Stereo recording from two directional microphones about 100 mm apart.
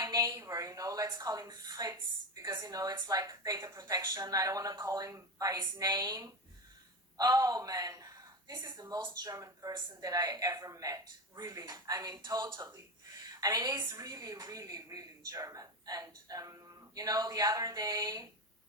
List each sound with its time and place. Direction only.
0.0 s a woman's voice: 30° right (ahead or behind)
7.2 s a woman's voice: 35° right (ahead or behind)
12.5 s a woman's voice: 30° right (ahead or behind)